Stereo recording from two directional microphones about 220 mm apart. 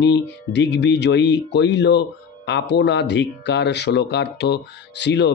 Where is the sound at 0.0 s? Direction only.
50° left (ahead or behind).